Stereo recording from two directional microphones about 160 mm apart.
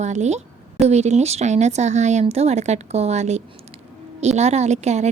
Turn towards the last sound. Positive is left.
turn(degrees=-45)  # may be behind; listen again after turning